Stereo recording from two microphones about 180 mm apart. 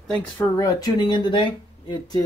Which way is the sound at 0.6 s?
20° left (ahead or behind).